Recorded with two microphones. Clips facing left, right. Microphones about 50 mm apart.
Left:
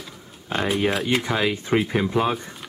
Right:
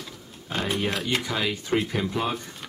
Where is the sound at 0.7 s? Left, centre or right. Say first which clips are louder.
Left 5 dB; centre.